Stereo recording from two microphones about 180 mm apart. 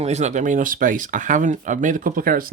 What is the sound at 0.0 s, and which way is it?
Speech, 40° right (ahead or behind).